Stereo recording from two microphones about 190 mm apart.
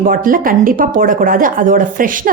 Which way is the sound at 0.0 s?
45° right (ahead or behind).